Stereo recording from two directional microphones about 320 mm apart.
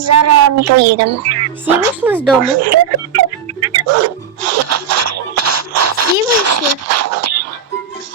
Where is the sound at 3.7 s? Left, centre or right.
Right.